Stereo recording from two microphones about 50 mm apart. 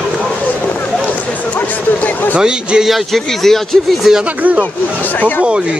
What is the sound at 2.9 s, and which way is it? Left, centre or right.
Speech, centre.